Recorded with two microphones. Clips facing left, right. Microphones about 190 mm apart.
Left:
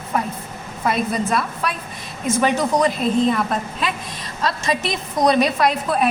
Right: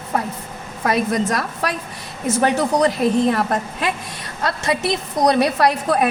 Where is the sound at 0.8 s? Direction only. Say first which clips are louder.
Right 2 dB; 75° right (ahead or behind).